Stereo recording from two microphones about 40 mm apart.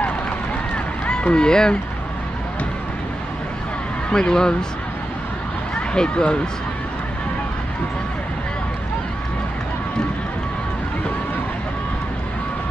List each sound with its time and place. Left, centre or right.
1.0 s speech: left
4.1 s speech: centre
5.8 s speech: left